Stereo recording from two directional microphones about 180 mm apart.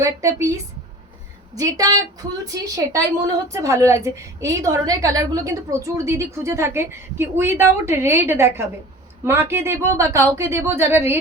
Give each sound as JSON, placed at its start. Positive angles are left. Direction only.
{"t": 0.0, "sound": "a woman's voice", "side_deg": -15}